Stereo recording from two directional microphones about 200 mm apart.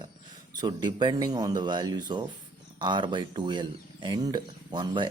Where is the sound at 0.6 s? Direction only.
20° right (ahead or behind).